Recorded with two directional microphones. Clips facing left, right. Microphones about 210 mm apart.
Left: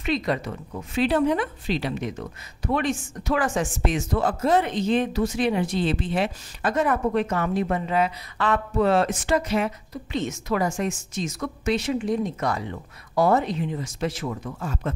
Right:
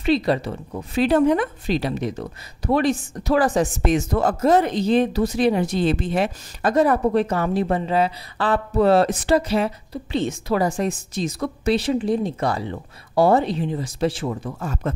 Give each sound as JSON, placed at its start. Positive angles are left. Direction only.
{"t": 0.0, "sound": "speech", "side_deg": -30}
{"t": 14.6, "sound": "a man's voice", "side_deg": -45}